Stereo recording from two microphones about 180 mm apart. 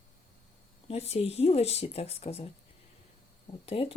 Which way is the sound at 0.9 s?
35° left (ahead or behind).